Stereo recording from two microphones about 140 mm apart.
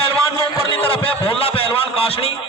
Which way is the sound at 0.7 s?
40° left (ahead or behind).